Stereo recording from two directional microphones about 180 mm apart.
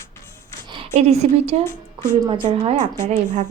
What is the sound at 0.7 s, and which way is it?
A woman's voice, 35° right (ahead or behind).